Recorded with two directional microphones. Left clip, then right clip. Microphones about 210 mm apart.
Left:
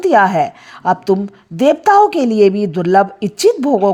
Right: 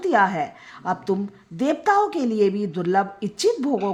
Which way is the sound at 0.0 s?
40° left (ahead or behind).